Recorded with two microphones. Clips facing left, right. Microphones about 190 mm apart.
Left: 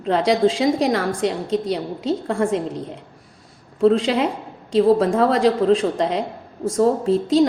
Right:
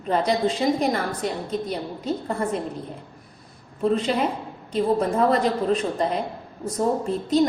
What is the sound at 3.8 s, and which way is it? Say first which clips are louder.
A woman's voice: left 5 dB; 90° left.